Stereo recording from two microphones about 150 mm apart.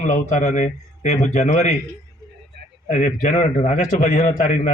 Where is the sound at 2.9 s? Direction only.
55° left (ahead or behind).